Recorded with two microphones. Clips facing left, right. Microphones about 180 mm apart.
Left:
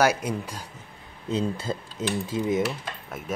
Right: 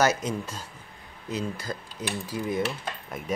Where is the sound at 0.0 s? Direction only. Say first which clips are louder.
Left 1 dB; 10° left (ahead or behind).